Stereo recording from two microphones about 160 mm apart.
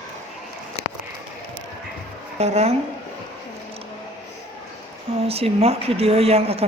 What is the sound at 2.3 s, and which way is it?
Speech, 40° right (ahead or behind).